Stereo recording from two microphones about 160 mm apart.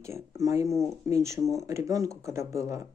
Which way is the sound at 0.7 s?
Centre (ahead or behind).